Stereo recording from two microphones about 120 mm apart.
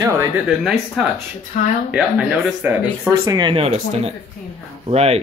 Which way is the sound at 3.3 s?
40° right (ahead or behind).